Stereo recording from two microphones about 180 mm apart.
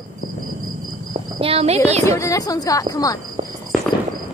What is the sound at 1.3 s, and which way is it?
Speech, 35° right (ahead or behind).